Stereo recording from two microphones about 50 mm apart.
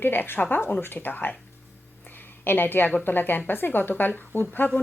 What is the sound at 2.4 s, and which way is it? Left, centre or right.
A woman's voice, left.